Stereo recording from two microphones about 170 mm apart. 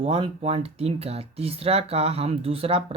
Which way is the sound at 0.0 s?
35° right (ahead or behind).